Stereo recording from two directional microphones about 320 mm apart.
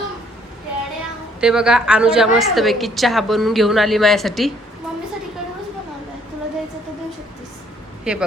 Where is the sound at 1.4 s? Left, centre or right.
Centre.